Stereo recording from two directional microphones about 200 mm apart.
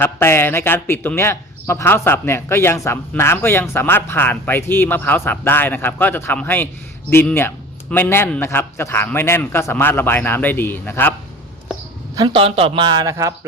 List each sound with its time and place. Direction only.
0.0 s speech: 10° left (ahead or behind)
12.1 s a man's voice: 25° right (ahead or behind)